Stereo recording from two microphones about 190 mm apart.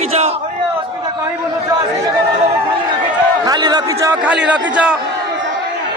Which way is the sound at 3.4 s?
20° right (ahead or behind).